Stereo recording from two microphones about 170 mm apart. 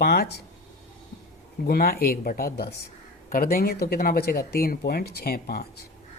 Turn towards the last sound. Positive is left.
turn(degrees=60)  # may be behind; listen again after turning